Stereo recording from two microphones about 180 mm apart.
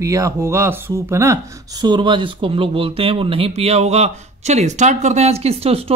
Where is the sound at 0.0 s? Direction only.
20° right (ahead or behind).